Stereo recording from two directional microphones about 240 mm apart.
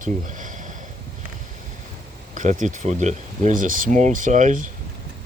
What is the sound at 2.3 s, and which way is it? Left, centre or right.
Speech, right.